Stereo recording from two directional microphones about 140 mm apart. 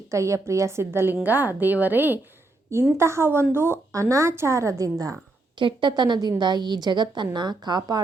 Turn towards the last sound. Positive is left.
turn(degrees=-30)  # may be behind; listen again after turning